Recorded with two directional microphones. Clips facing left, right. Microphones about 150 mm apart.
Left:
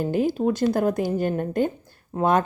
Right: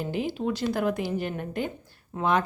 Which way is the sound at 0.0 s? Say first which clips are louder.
Left 7 dB; 45° left (ahead or behind).